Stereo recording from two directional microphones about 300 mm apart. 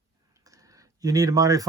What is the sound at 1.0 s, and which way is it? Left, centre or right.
Speech, centre.